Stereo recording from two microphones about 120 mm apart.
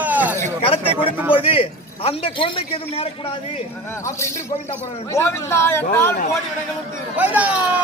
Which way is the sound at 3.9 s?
25° left (ahead or behind).